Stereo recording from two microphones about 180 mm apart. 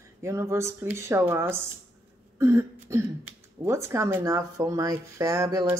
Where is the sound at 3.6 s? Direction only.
15° right (ahead or behind).